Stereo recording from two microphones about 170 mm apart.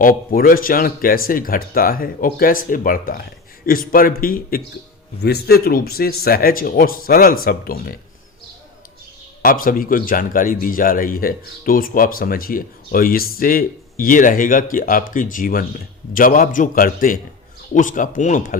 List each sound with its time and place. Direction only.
0.0 s speech: 55° left (ahead or behind)
9.4 s a man's voice: 55° left (ahead or behind)